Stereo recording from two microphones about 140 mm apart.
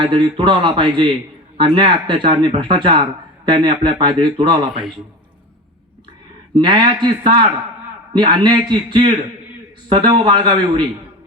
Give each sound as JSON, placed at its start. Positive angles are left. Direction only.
{"t": 0.0, "sound": "speech", "side_deg": -35}
{"t": 6.6, "sound": "speech", "side_deg": -35}